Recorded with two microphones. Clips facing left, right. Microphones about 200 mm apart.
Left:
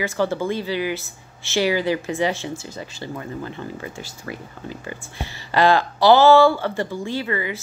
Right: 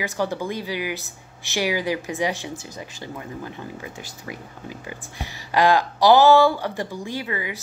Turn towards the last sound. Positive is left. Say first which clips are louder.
# left 4 dB
turn(degrees=-10)  # may be behind; listen again after turning